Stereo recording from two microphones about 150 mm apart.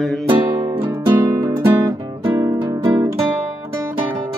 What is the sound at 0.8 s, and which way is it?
Music, 25° right (ahead or behind).